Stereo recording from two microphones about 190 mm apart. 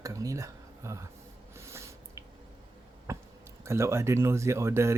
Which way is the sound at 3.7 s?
15° right (ahead or behind).